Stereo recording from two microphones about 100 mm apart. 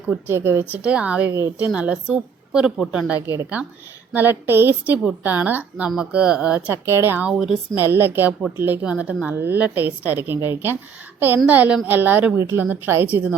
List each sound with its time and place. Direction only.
0.1 s a woman's voice: 20° right (ahead or behind)
0.6 s a woman's voice: 10° right (ahead or behind)
6.8 s a woman's voice: 25° right (ahead or behind)
7.3 s a woman's voice: 5° right (ahead or behind)
7.8 s a woman's voice: 20° right (ahead or behind)